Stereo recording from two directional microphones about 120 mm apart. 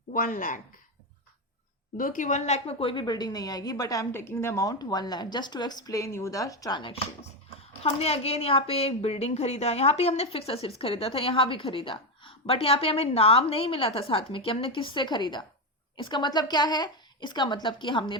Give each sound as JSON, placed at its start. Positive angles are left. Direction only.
{"t": 0.3, "sound": "speech", "side_deg": 90}
{"t": 2.1, "sound": "a woman's voice", "side_deg": 90}
{"t": 7.8, "sound": "a woman's voice", "side_deg": 60}